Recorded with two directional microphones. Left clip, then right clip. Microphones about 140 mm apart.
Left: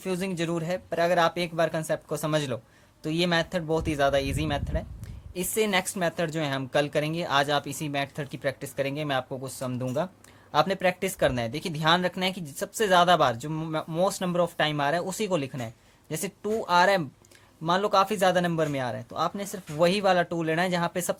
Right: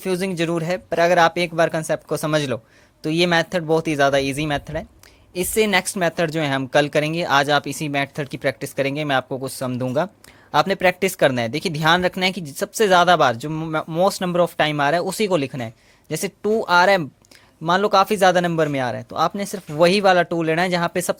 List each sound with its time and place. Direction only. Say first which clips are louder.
0.0 s speech: right 8 dB; 35° right (ahead or behind)
13.5 s speech: right 7 dB; 25° right (ahead or behind)